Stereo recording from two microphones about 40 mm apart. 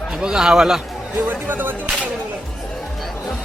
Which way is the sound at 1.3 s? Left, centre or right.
Right.